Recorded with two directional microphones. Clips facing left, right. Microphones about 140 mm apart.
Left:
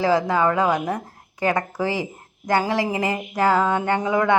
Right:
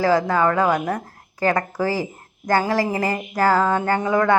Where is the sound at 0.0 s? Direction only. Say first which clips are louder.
Right 1 dB; 25° left (ahead or behind).